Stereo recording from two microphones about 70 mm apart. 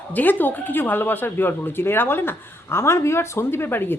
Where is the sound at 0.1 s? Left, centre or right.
Left.